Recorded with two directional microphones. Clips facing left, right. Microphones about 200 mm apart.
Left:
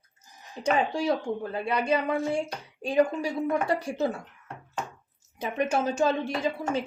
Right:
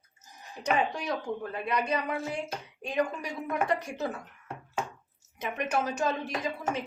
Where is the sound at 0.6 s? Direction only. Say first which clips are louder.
Left 4 dB; 30° left (ahead or behind).